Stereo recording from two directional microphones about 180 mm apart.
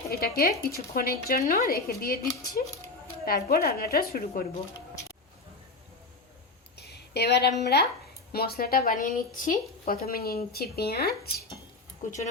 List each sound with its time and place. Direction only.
0.1 s speech: 55° left (ahead or behind)
6.7 s a sound: 65° left (ahead or behind)
7.6 s speech: 65° left (ahead or behind)
12.0 s speech: 45° left (ahead or behind)